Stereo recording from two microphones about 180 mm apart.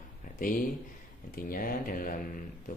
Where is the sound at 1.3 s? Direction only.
55° left (ahead or behind).